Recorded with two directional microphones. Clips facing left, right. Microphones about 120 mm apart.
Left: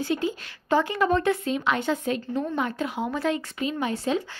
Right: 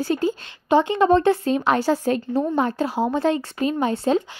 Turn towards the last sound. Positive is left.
turn(degrees=-30)  # may be behind; listen again after turning